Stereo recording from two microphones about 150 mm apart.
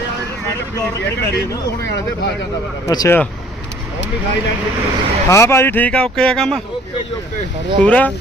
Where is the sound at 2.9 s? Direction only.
25° left (ahead or behind).